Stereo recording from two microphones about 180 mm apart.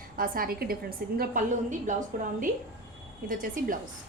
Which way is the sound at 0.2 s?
55° right (ahead or behind).